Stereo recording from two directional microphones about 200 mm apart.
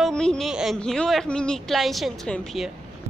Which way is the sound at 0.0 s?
5° left (ahead or behind).